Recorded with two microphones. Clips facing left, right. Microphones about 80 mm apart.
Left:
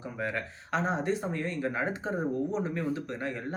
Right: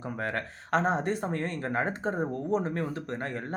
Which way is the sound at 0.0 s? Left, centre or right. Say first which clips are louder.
Right 1 dB; right.